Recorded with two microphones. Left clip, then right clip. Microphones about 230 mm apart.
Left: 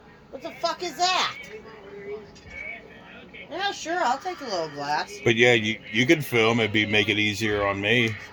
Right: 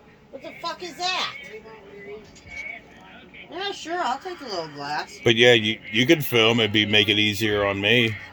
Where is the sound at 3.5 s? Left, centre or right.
Left.